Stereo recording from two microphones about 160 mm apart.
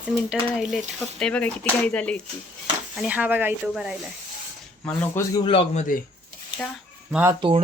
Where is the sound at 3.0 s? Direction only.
5° right (ahead or behind).